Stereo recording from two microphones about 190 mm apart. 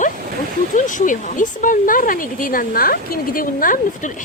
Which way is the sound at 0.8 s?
40° left (ahead or behind).